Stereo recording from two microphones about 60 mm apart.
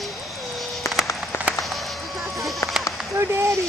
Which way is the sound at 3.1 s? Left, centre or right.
Right.